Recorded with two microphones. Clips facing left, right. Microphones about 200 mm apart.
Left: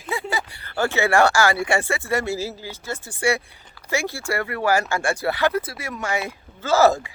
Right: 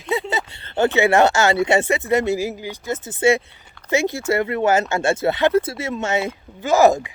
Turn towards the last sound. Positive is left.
turn(degrees=-15)  # may be behind; listen again after turning